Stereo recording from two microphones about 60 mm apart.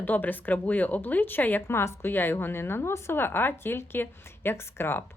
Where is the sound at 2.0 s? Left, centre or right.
Left.